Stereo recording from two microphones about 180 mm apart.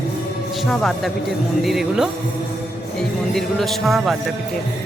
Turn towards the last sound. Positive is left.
turn(degrees=0)  # may be behind; listen again after turning